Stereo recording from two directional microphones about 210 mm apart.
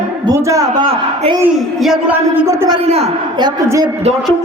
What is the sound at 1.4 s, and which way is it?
A man's voice, 5° right (ahead or behind).